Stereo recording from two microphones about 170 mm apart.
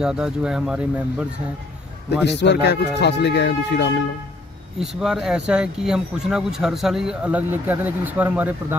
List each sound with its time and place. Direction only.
0.0 s speech: 5° right (ahead or behind)
2.2 s speech: 90° left
4.7 s speech: 5° right (ahead or behind)